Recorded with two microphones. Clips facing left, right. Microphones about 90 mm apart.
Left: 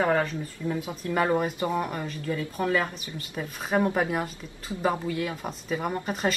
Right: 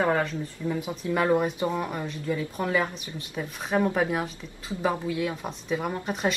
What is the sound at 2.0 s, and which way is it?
Speech, 10° right (ahead or behind).